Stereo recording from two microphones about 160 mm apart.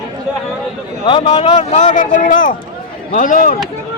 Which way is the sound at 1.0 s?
30° left (ahead or behind).